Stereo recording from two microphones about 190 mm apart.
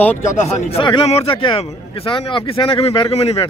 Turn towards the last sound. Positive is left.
turn(degrees=30)  # may be behind; listen again after turning